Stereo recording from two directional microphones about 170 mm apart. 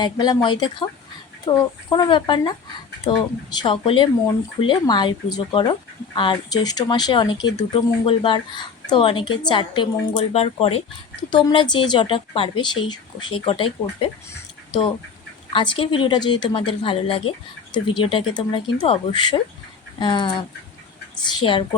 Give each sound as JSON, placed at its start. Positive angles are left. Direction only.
{"t": 0.0, "sound": "a woman's voice", "side_deg": 25}
{"t": 15.5, "sound": "speech", "side_deg": 30}
{"t": 21.4, "sound": "speech", "side_deg": 30}